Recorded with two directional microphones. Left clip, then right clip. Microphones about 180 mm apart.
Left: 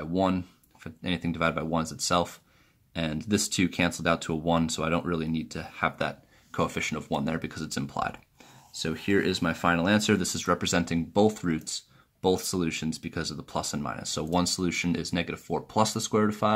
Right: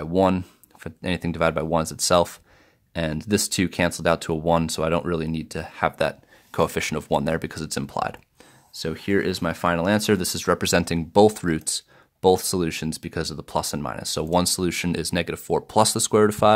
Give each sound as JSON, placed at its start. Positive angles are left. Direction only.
{"t": 0.0, "sound": "speech", "side_deg": -55}
{"t": 8.7, "sound": "speech", "side_deg": -40}